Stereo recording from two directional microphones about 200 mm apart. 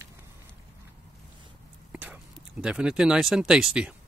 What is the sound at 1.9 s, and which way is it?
Speech, 5° right (ahead or behind).